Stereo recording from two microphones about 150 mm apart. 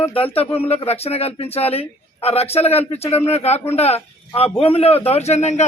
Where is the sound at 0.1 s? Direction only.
40° left (ahead or behind).